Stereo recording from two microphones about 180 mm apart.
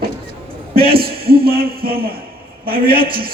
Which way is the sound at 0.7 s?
55° right (ahead or behind).